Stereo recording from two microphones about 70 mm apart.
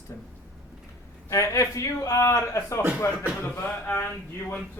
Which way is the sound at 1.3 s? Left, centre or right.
Left.